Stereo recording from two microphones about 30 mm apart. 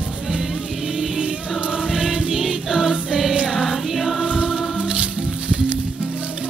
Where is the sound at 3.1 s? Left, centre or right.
Right.